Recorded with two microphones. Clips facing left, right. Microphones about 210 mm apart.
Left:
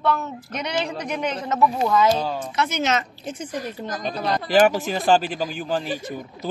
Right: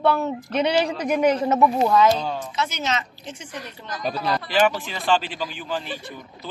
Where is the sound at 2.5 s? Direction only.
60° left (ahead or behind).